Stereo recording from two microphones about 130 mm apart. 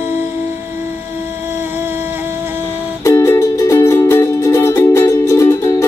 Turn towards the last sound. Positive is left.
turn(degrees=20)  # may be behind; listen again after turning